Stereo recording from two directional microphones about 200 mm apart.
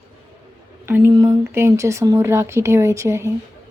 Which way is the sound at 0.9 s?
10° right (ahead or behind).